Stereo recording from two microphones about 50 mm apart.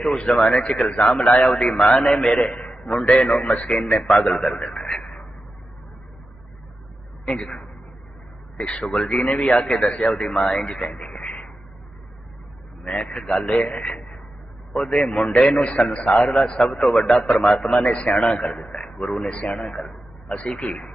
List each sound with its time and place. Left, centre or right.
0.0 s a man's voice: centre
7.3 s a man's voice: centre
12.8 s a man's voice: left